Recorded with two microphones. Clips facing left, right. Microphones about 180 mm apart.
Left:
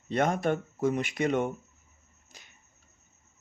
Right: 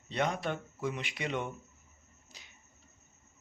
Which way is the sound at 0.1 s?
50° left (ahead or behind).